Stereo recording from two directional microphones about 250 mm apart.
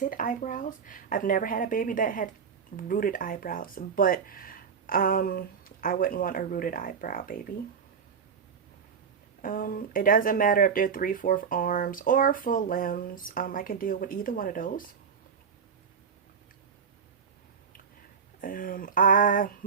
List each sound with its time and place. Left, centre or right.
0.0 s speech: left
9.4 s speech: left
18.3 s speech: left